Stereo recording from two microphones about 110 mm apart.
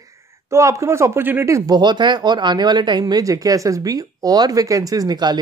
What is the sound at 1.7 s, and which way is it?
Speech, 40° right (ahead or behind).